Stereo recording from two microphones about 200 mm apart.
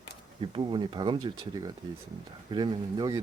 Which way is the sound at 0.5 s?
25° right (ahead or behind).